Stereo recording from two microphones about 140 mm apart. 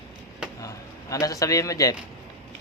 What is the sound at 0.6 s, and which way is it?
A man's voice, 25° left (ahead or behind).